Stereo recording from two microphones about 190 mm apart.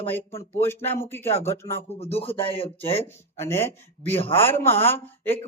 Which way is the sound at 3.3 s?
10° left (ahead or behind).